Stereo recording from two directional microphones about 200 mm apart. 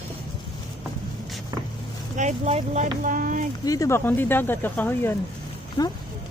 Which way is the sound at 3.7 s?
15° left (ahead or behind).